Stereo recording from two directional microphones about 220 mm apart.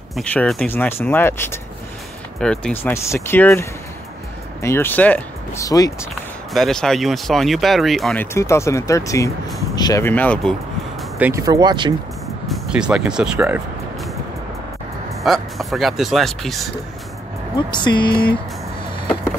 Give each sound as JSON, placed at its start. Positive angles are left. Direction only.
{"t": 0.1, "sound": "speech", "side_deg": 5}
{"t": 6.5, "sound": "speech", "side_deg": 0}
{"t": 11.1, "sound": "speech", "side_deg": -10}
{"t": 12.4, "sound": "speech", "side_deg": -5}
{"t": 15.2, "sound": "speech", "side_deg": 0}
{"t": 17.6, "sound": "speech", "side_deg": 20}